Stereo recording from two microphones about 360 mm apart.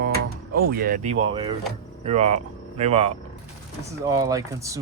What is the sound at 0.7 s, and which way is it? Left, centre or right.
Speech, right.